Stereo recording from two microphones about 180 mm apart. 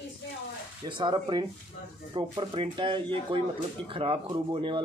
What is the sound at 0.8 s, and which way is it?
Speech, 25° right (ahead or behind).